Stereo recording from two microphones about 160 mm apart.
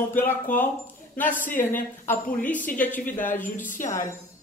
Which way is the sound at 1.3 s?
55° left (ahead or behind).